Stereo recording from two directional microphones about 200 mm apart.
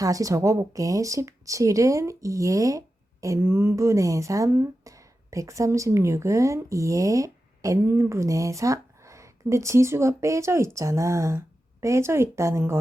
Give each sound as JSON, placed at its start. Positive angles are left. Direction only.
{"t": 0.0, "sound": "a woman's voice", "side_deg": -15}